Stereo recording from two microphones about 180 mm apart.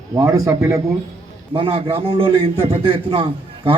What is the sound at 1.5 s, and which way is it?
A man's voice, 30° right (ahead or behind).